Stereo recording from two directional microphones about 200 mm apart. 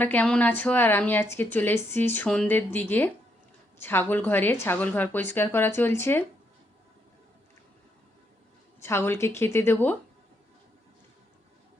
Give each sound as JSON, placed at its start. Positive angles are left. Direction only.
{"t": 0.0, "sound": "a woman's voice", "side_deg": 10}
{"t": 8.8, "sound": "a woman's voice", "side_deg": 10}